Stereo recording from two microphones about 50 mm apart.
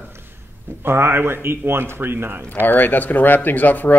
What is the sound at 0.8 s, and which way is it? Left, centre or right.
Speech, right.